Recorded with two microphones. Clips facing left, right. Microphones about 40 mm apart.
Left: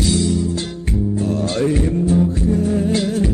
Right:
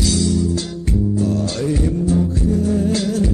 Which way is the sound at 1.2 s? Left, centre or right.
Left.